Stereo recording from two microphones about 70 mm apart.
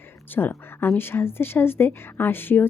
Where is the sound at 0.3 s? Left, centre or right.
Left.